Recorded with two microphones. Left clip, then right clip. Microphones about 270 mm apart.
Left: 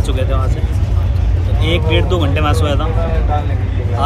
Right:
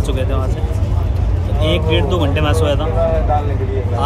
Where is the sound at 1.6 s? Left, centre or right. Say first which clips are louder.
Even; centre.